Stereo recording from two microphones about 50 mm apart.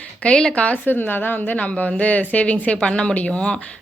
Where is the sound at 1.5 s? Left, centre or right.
Left.